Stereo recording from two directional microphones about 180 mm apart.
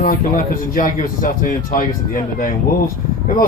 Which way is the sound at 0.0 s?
45° left (ahead or behind).